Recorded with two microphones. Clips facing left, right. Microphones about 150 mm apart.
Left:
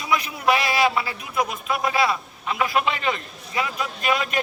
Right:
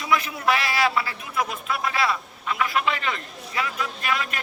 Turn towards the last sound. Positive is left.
turn(degrees=20)  # may be behind; listen again after turning